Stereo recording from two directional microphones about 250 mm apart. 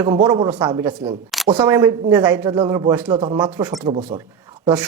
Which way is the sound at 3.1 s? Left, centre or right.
Right.